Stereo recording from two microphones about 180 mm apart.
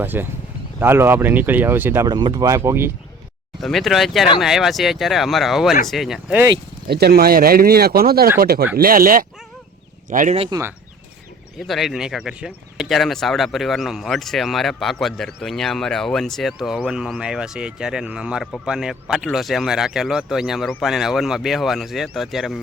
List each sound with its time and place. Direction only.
0.0 s speech: 10° right (ahead or behind)
3.6 s speech: centre (ahead or behind)
6.8 s speech: 60° right (ahead or behind)
10.5 s speech: 15° right (ahead or behind)
11.6 s speech: centre (ahead or behind)